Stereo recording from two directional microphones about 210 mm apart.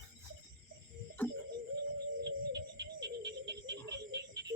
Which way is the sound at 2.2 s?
55° right (ahead or behind).